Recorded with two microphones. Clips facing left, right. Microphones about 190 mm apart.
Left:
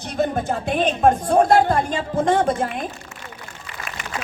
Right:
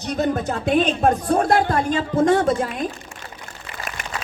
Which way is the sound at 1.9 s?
45° right (ahead or behind).